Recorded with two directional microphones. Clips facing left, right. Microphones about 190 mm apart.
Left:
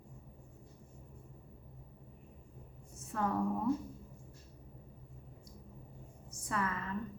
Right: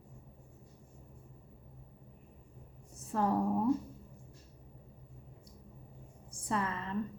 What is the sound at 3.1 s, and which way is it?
Speech, 35° right (ahead or behind).